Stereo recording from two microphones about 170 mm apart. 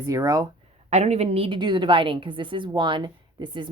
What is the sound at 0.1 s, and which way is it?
Speech, 20° right (ahead or behind).